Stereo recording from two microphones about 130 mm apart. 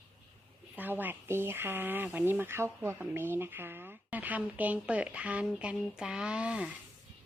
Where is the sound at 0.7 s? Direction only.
15° right (ahead or behind).